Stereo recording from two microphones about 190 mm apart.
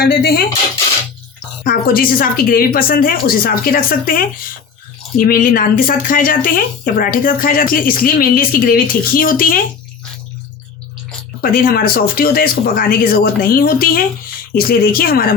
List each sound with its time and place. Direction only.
0.0 s speech: 55° left (ahead or behind)
1.6 s speech: 50° left (ahead or behind)
11.5 s speech: 50° left (ahead or behind)